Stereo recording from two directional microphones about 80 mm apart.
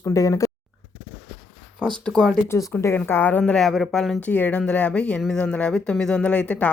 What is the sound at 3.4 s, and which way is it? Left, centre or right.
Speech, centre.